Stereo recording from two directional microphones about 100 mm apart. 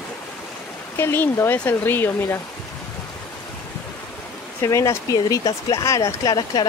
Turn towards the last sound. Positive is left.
turn(degrees=40)  # may be behind; listen again after turning